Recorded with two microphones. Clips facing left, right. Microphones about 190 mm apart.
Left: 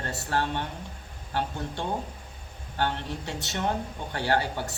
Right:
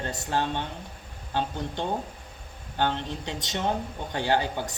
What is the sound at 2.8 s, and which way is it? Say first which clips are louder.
Speech: right 2 dB; 20° right (ahead or behind).